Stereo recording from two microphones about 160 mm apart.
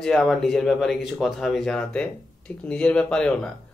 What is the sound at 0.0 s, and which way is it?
Speech, centre (ahead or behind).